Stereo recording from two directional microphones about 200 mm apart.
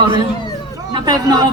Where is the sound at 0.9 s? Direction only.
20° right (ahead or behind).